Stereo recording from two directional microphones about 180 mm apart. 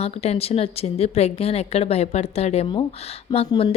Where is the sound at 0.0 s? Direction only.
35° left (ahead or behind).